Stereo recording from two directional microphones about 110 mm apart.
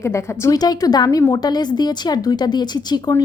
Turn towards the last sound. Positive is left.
turn(degrees=40)  # may be behind; listen again after turning